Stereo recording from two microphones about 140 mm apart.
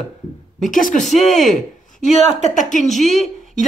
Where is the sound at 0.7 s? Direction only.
65° left (ahead or behind).